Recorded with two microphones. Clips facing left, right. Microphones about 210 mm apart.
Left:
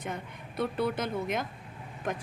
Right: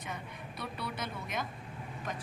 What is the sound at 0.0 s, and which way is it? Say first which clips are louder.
A woman's voice: left 5 dB; 50° left (ahead or behind).